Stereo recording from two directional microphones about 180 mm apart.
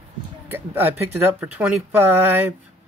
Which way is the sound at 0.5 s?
10° right (ahead or behind).